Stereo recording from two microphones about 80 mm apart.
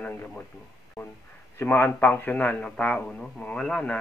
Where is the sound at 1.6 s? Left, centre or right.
Left.